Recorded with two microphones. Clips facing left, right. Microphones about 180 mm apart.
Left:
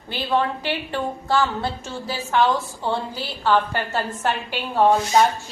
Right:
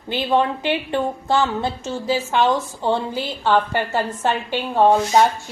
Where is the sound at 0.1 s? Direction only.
20° right (ahead or behind).